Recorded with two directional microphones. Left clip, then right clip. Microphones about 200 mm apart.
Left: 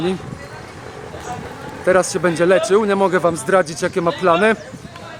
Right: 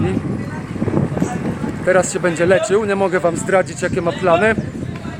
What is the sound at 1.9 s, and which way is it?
Speech, 5° left (ahead or behind).